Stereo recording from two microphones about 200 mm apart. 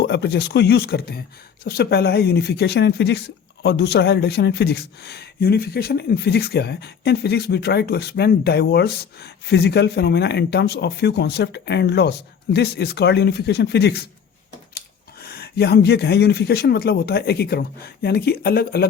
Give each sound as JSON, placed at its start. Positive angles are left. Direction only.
{"t": 0.0, "sound": "speech", "side_deg": 55}